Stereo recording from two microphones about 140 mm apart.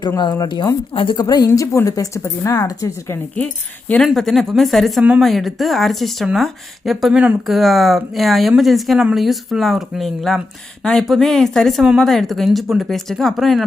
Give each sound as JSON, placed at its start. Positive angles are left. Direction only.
{"t": 0.2, "sound": "speech", "side_deg": 30}
{"t": 3.3, "sound": "speech", "side_deg": 10}